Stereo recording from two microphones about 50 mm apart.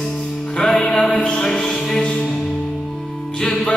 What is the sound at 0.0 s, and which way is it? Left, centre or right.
Music, centre.